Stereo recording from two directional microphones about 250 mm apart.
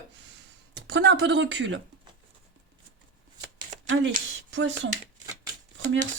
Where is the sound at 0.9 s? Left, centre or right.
Right.